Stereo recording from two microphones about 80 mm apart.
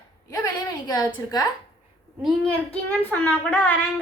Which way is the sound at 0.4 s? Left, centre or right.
Left.